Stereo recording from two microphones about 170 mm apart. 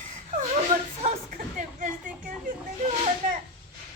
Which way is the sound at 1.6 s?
50° right (ahead or behind).